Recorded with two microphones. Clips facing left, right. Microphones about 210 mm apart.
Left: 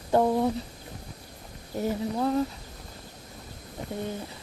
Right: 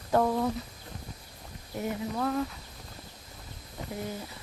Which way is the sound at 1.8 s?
30° left (ahead or behind).